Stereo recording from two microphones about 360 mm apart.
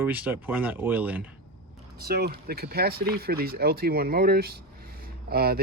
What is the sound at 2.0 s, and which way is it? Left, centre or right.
Speech, right.